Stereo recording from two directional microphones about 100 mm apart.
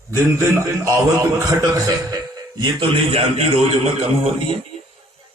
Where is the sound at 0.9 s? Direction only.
30° right (ahead or behind).